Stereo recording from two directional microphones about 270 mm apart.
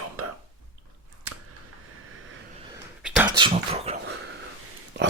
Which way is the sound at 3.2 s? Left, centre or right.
Centre.